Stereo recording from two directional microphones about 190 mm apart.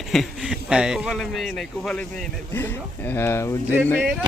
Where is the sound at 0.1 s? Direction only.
Centre (ahead or behind).